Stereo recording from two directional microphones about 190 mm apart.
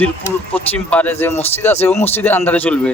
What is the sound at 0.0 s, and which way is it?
Speech, 10° left (ahead or behind).